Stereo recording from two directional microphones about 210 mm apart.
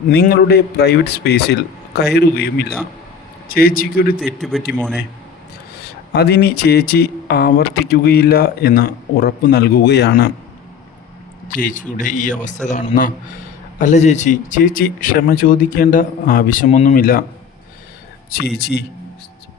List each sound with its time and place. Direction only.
0.1 s speech: 50° left (ahead or behind)
4.4 s speech: centre (ahead or behind)
6.1 s speech: 50° left (ahead or behind)
11.4 s speech: 40° left (ahead or behind)
18.3 s speech: 45° left (ahead or behind)